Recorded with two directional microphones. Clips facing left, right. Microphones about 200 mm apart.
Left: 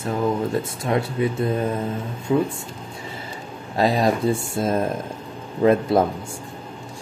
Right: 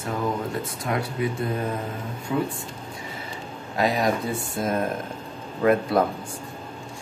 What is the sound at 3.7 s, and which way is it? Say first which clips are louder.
Speech: left 3 dB; 30° left (ahead or behind).